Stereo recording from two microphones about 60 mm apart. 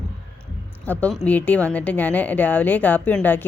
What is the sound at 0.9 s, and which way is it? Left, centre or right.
A woman's voice, left.